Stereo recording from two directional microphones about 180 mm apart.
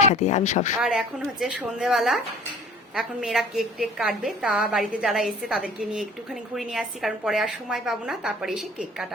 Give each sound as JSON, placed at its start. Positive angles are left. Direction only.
{"t": 0.0, "sound": "speech", "side_deg": 40}
{"t": 0.8, "sound": "a woman's voice", "side_deg": -5}